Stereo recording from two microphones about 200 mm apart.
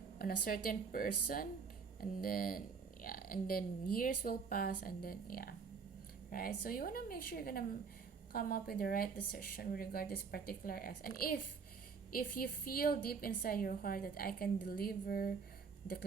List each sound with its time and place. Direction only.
0.2 s speech: 45° left (ahead or behind)